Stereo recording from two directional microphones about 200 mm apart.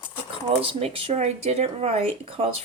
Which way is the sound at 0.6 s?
30° right (ahead or behind).